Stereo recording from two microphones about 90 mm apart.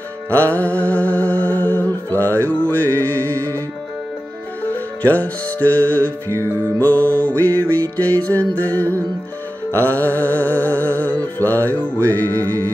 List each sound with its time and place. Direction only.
0.3 s music: 30° right (ahead or behind)
0.6 s music: 15° left (ahead or behind)
3.3 s music: 40° right (ahead or behind)
5.0 s music: 20° left (ahead or behind)
9.7 s music: 30° right (ahead or behind)
9.9 s music: 20° left (ahead or behind)